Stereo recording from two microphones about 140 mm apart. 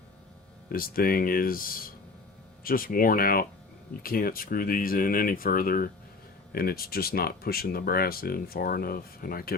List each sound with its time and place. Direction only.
0.7 s speech: 90° left